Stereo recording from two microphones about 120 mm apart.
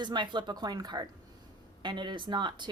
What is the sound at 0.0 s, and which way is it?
A woman's voice, 40° right (ahead or behind).